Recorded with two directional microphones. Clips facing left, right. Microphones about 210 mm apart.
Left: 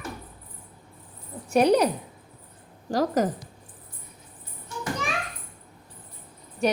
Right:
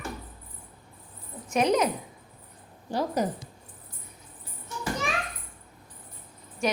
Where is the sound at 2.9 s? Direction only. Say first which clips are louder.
Left 4 dB; 90° left.